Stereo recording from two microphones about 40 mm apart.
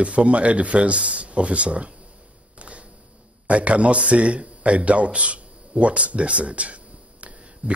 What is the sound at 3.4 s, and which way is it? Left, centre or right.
Speech, right.